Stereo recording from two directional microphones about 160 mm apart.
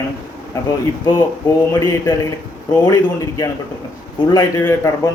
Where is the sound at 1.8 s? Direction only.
20° left (ahead or behind).